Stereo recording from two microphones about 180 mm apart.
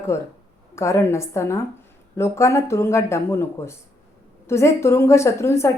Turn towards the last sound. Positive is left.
turn(degrees=15)  # may be behind; listen again after turning